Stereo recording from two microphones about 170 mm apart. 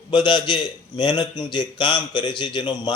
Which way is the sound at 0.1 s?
25° left (ahead or behind).